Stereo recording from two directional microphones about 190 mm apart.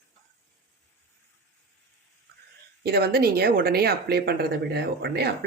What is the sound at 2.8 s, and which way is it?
Speech, 55° right (ahead or behind).